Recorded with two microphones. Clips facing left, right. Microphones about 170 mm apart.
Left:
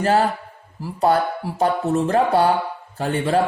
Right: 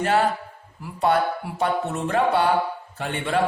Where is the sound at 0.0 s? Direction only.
35° left (ahead or behind).